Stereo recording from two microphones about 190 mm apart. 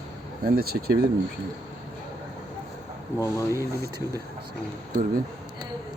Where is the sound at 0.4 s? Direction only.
55° right (ahead or behind).